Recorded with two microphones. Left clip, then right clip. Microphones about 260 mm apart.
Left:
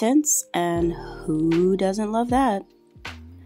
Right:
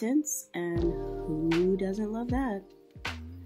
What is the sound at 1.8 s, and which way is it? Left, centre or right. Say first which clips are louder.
Speech: left 10 dB; left.